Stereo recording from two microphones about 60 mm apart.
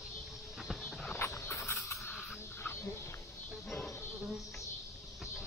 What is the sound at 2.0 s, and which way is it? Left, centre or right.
Crow, left.